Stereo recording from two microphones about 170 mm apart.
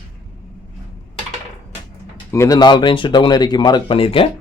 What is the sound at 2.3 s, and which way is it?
Speech, 20° left (ahead or behind).